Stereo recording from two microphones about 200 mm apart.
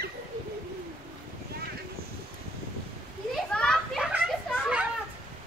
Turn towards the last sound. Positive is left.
turn(degrees=-5)  # may be behind; listen again after turning